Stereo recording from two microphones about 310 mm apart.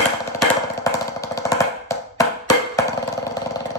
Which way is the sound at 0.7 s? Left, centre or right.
Centre.